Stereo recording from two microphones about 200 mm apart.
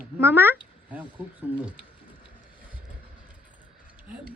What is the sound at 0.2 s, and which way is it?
A man's voice, 10° right (ahead or behind).